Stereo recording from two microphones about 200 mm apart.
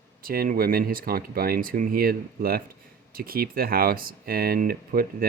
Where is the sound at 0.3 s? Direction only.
45° right (ahead or behind).